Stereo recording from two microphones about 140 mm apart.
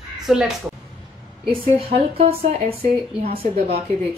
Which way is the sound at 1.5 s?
45° right (ahead or behind).